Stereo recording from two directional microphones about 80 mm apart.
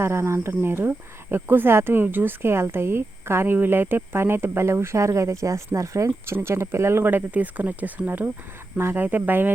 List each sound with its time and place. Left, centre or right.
0.0 s speech: right
6.1 s speech: right
7.0 s speech: right